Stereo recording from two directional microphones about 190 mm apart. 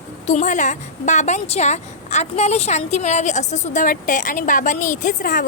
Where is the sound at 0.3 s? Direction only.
40° left (ahead or behind).